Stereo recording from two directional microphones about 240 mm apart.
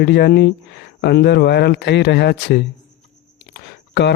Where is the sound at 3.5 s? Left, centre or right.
Left.